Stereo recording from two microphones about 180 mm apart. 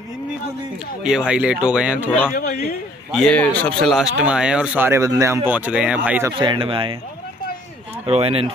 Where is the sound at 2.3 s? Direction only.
55° left (ahead or behind).